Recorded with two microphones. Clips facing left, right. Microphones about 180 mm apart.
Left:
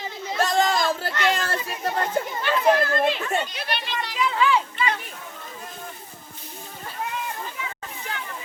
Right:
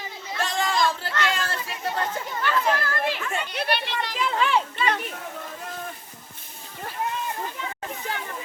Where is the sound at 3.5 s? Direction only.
60° right (ahead or behind).